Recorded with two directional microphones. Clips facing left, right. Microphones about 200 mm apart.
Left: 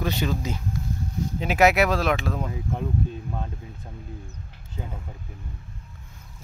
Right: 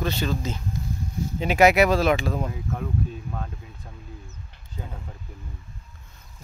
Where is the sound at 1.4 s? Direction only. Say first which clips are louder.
Right 2 dB; centre (ahead or behind).